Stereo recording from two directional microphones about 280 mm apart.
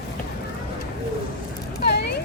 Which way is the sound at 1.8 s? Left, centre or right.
Left.